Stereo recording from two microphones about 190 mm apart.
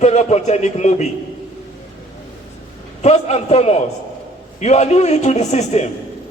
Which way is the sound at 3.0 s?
35° left (ahead or behind).